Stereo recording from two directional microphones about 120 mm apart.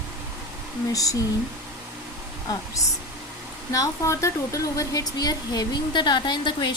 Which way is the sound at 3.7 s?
25° left (ahead or behind).